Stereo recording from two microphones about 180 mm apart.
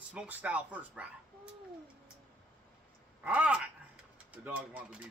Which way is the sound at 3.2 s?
5° right (ahead or behind).